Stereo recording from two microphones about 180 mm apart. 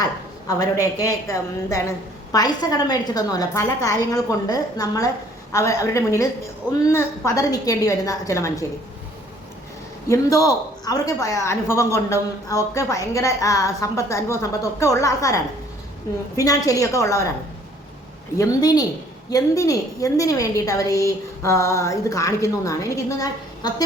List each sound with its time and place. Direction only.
0.4 s a woman's voice: 20° left (ahead or behind)
10.1 s a woman's voice: 20° left (ahead or behind)
16.4 s a woman's voice: 20° left (ahead or behind)
18.3 s a woman's voice: 20° left (ahead or behind)